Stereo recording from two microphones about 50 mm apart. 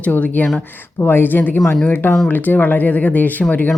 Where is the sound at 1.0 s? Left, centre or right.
Left.